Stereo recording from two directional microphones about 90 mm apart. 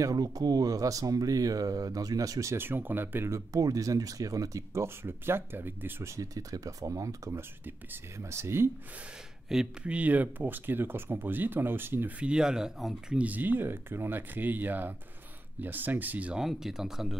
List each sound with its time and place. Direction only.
0.0 s speech: 45° right (ahead or behind)
2.5 s speech: 25° right (ahead or behind)
9.5 s speech: 10° right (ahead or behind)
12.3 s speech: 10° right (ahead or behind)
13.2 s speech: 20° right (ahead or behind)